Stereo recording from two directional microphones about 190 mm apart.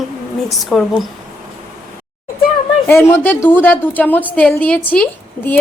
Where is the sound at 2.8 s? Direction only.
10° left (ahead or behind).